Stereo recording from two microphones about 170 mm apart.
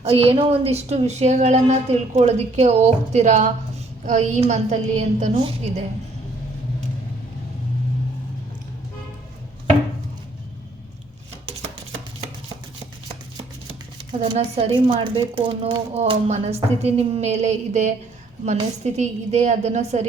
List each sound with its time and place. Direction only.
0.0 s a woman's voice: 35° right (ahead or behind)
14.1 s a woman's voice: 30° right (ahead or behind)
18.9 s a woman's voice: 40° right (ahead or behind)